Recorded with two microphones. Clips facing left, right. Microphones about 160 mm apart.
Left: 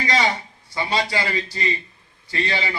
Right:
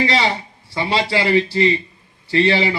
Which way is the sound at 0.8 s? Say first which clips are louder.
Right 4 dB; 30° right (ahead or behind).